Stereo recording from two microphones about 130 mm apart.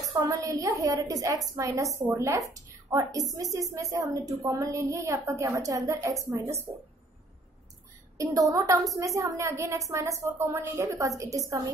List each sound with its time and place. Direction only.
0.0 s a woman's voice: 25° right (ahead or behind)
8.2 s a woman's voice: 25° right (ahead or behind)